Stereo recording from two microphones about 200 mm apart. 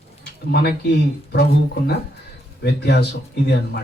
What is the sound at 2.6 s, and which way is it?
Speech, 55° left (ahead or behind).